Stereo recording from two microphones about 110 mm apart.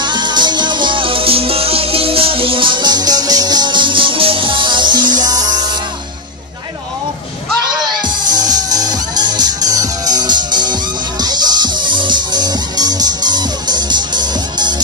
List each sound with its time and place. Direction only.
0.0 s music: 45° right (ahead or behind)
7.8 s music: 40° right (ahead or behind)